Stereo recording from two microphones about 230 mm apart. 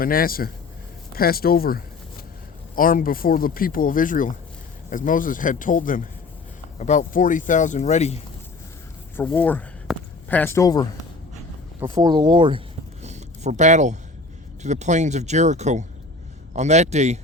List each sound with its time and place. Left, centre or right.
0.0 s speech: left
9.1 s a sound: centre
11.8 s speech: centre